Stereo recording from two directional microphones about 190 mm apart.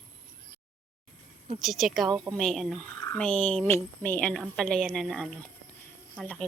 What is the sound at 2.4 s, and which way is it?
Speech, centre (ahead or behind).